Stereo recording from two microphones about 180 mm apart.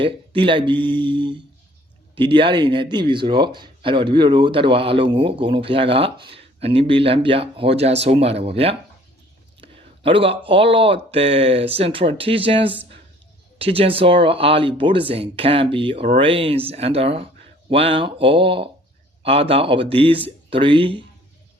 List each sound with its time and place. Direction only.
0.0 s speech: 30° right (ahead or behind)